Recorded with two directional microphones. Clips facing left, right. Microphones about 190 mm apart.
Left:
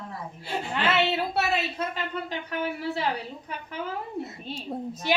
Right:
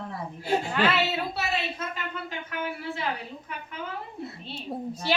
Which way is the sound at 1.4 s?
60° left (ahead or behind).